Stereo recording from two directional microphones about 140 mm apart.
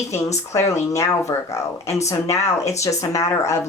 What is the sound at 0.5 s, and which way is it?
Speech, 20° left (ahead or behind).